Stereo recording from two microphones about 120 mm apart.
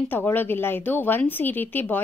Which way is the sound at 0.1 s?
15° left (ahead or behind).